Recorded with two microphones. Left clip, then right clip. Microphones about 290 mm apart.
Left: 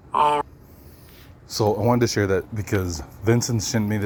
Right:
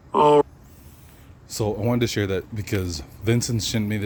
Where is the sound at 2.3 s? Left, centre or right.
Centre.